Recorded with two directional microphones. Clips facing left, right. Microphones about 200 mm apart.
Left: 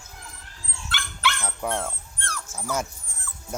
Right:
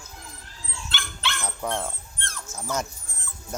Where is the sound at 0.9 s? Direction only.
25° right (ahead or behind).